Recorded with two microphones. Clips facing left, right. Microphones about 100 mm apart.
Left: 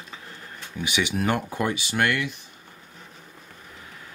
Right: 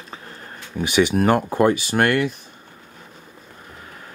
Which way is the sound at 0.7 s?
45° right (ahead or behind).